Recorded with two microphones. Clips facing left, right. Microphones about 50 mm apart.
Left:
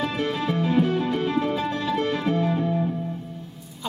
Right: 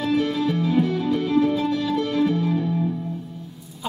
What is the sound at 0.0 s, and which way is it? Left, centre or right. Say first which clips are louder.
Music: right 4 dB; left.